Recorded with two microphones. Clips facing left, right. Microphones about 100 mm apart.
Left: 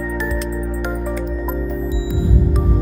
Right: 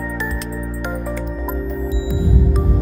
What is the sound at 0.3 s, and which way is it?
Music, centre (ahead or behind).